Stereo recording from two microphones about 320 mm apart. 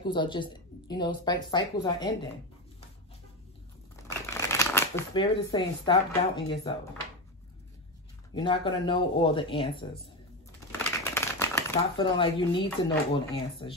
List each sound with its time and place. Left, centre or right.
0.0 s speech: centre
4.3 s speech: centre
8.4 s speech: centre
11.1 s speech: centre